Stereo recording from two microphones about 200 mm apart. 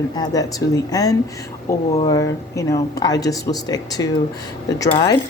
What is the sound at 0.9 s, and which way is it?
A woman's voice, 20° left (ahead or behind).